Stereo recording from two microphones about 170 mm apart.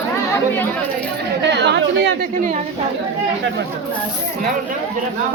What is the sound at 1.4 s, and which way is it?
Speech, 90° right.